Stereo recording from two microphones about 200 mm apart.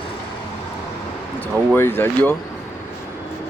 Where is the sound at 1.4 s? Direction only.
10° left (ahead or behind).